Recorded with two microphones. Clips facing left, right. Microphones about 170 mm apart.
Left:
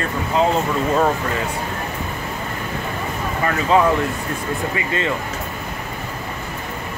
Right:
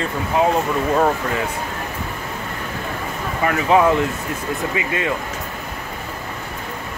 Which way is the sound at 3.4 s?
15° right (ahead or behind).